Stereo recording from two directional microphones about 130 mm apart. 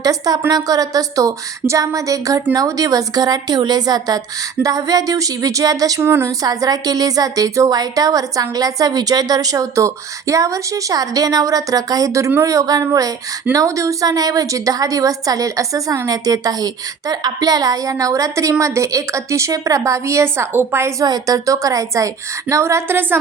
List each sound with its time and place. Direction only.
0.0 s speech: 30° right (ahead or behind)
21.0 s speech: 30° right (ahead or behind)